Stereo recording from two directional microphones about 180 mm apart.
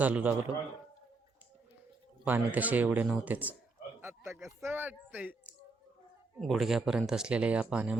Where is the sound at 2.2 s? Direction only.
10° right (ahead or behind).